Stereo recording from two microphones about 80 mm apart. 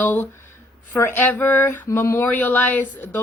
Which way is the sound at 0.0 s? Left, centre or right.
Left.